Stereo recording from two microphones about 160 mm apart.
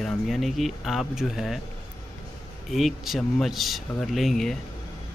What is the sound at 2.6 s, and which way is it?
Speech, centre (ahead or behind).